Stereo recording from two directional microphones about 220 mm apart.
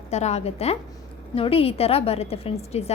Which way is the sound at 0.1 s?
30° left (ahead or behind).